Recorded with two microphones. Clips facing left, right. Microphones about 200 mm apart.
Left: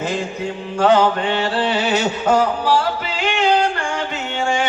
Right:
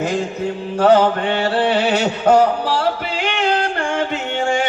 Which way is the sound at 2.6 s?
60° right (ahead or behind).